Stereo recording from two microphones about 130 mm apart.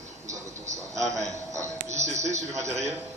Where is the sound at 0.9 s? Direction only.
25° right (ahead or behind).